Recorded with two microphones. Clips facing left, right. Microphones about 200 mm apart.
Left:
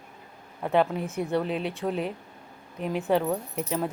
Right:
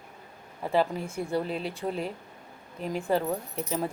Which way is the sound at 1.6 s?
35° right (ahead or behind).